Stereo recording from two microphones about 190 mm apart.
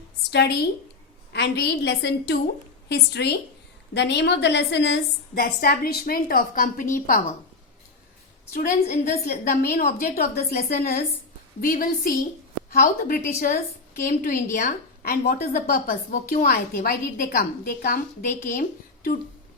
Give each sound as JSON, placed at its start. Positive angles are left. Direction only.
{"t": 0.3, "sound": "a woman's voice", "side_deg": 60}
{"t": 5.3, "sound": "a woman's voice", "side_deg": 50}
{"t": 8.5, "sound": "a woman's voice", "side_deg": 50}